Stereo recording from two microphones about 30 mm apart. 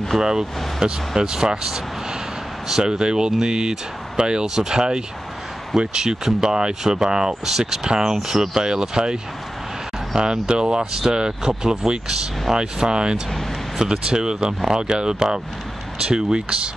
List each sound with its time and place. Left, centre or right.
0.2 s speech: right